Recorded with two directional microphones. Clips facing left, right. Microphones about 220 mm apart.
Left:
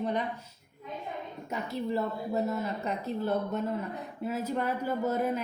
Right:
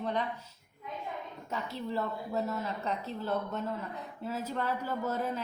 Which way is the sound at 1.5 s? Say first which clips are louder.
Left 4 dB; 15° left (ahead or behind).